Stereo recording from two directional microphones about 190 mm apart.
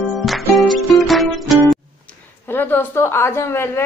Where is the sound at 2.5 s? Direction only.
10° left (ahead or behind).